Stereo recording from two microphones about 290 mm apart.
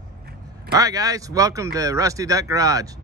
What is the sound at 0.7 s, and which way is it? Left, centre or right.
Speech, centre.